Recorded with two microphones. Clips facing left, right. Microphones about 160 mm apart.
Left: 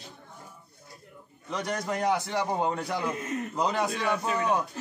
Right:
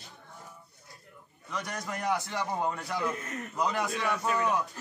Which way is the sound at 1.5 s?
25° left (ahead or behind).